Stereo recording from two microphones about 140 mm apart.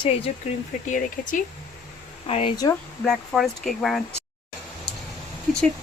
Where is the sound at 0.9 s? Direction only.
70° left (ahead or behind).